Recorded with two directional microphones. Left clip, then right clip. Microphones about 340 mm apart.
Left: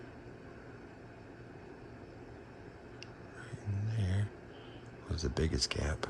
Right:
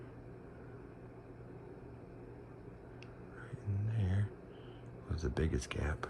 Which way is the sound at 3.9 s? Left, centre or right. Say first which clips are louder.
Left 2 dB; centre.